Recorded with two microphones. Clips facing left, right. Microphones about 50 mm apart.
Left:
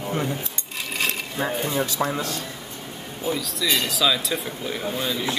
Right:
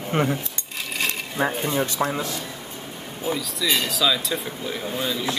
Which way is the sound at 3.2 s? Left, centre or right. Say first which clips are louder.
Even; centre.